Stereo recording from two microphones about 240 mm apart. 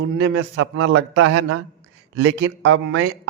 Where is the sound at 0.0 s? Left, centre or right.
Right.